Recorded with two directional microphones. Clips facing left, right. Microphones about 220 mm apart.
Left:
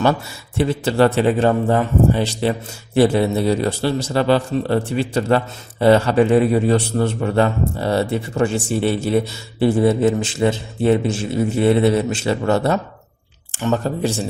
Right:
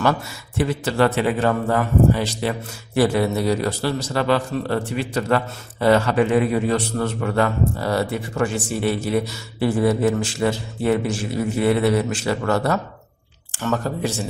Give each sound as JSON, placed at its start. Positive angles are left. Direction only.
{"t": 0.0, "sound": "a man's voice", "side_deg": 25}